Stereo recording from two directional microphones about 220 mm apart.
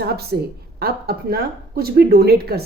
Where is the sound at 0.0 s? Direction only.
45° right (ahead or behind).